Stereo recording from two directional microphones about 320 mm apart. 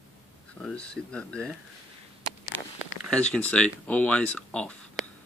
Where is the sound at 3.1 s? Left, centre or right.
Centre.